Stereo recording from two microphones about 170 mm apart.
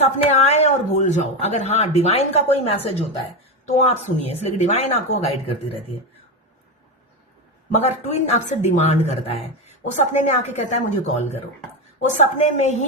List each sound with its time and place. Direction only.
0.0 s speech: 40° left (ahead or behind)
7.7 s a woman's voice: 40° left (ahead or behind)